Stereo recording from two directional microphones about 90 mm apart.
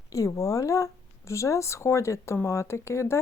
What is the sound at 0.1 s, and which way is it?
Speech, 40° left (ahead or behind).